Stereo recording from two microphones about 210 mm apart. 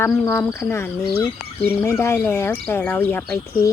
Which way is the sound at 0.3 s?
10° left (ahead or behind).